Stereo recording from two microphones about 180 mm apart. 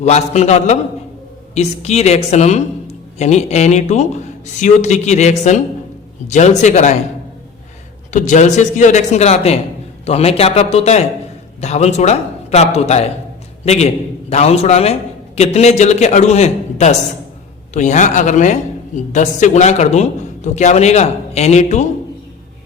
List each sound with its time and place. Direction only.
0.0 s speech: 40° left (ahead or behind)
8.1 s speech: 40° left (ahead or behind)